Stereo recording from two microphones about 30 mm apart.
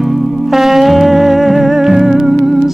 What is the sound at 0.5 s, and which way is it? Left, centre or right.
Music, centre.